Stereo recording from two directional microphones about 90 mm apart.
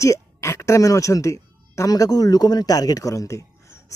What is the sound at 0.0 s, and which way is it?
A woman's voice, 35° left (ahead or behind).